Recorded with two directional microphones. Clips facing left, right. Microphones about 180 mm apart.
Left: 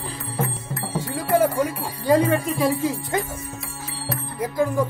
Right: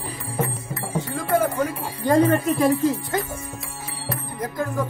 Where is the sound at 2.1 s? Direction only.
10° left (ahead or behind).